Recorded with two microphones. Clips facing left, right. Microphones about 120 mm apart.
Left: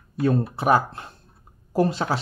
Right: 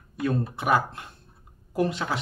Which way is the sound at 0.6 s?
35° left (ahead or behind).